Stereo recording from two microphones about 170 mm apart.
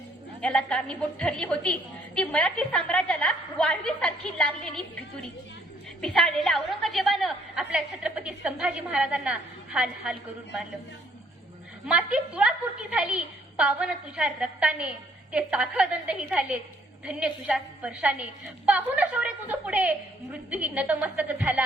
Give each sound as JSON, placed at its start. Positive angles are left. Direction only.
{"t": 0.4, "sound": "a woman's voice", "side_deg": 5}
{"t": 6.0, "sound": "a woman's voice", "side_deg": 0}
{"t": 11.9, "sound": "a woman's voice", "side_deg": -5}